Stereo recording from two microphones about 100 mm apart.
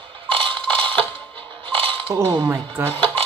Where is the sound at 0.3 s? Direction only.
60° right (ahead or behind).